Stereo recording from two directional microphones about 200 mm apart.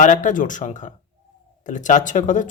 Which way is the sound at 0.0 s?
40° left (ahead or behind).